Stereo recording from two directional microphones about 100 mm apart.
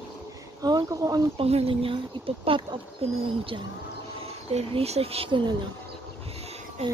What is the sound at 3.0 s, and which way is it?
Speech, 90° right.